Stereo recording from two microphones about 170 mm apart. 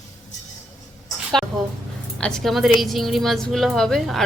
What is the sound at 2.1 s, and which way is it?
A woman's voice, 5° left (ahead or behind).